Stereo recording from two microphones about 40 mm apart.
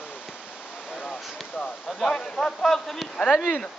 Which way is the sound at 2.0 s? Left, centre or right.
Centre.